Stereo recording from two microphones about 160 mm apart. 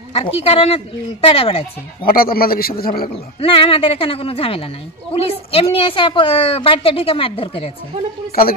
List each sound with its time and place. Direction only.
0.1 s a woman's voice: 40° left (ahead or behind)
2.0 s a man's voice: 65° left (ahead or behind)
3.3 s a woman's voice: 35° left (ahead or behind)